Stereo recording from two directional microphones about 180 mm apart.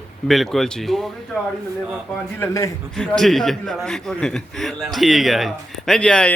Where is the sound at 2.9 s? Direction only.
5° left (ahead or behind).